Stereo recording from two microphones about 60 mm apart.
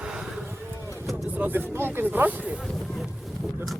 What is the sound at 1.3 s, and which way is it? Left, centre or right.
Speech, right.